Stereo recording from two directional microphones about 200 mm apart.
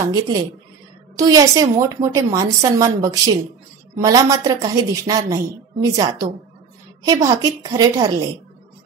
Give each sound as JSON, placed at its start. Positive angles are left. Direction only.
{"t": 0.0, "sound": "a woman's voice", "side_deg": -15}